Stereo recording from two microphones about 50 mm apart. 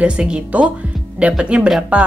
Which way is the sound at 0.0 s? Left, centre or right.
Right.